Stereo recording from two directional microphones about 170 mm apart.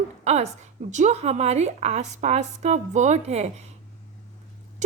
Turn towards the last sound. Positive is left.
turn(degrees=-40)  # may be behind; listen again after turning